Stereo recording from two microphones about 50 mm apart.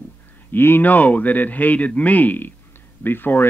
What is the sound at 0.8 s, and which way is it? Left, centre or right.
Speech, left.